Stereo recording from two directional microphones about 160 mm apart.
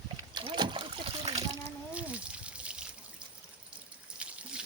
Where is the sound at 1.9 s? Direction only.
10° right (ahead or behind).